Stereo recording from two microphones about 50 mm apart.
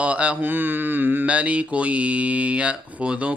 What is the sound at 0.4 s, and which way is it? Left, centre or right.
Mantra, right.